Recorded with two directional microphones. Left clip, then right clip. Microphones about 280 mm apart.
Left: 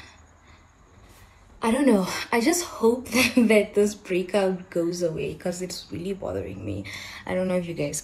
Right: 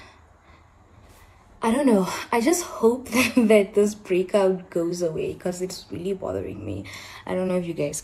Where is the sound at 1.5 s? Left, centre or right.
Centre.